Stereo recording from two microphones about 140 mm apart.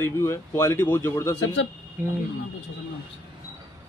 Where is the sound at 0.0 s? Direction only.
20° left (ahead or behind).